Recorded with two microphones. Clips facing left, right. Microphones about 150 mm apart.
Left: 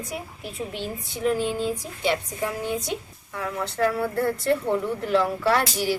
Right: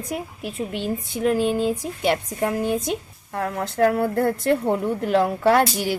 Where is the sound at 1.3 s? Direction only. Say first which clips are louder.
Right 7 dB; 15° right (ahead or behind).